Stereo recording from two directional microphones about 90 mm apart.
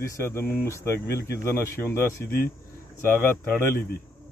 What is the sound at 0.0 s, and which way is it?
Speech, 30° left (ahead or behind).